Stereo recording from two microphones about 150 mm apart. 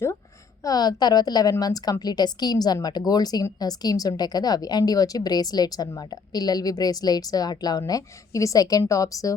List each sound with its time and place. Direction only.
0.6 s a woman's voice: 25° left (ahead or behind)